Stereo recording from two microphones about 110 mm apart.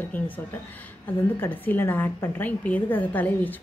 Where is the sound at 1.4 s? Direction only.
15° left (ahead or behind).